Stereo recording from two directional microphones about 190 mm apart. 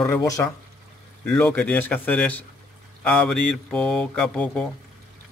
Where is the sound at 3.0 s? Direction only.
5° left (ahead or behind).